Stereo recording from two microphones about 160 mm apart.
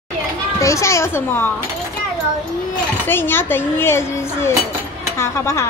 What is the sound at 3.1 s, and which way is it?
Speech, 15° left (ahead or behind).